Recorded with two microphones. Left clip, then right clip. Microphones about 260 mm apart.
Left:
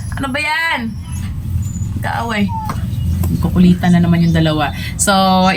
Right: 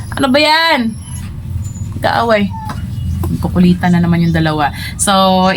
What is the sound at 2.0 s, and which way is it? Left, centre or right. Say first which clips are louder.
Speech: right 8 dB; right.